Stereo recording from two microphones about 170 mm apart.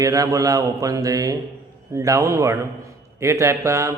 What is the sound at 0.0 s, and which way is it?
A man's voice, 20° right (ahead or behind).